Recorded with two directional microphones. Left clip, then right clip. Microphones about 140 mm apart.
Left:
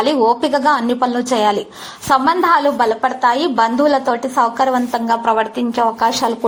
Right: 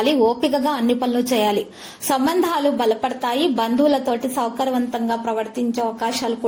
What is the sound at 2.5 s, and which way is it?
A woman's voice, 15° right (ahead or behind).